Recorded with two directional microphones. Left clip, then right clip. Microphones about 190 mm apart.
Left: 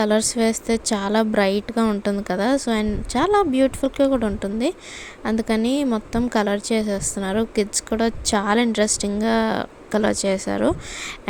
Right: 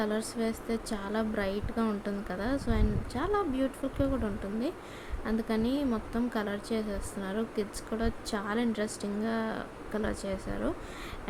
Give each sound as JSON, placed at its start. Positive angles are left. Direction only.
{"t": 0.0, "sound": "a woman's voice", "side_deg": 45}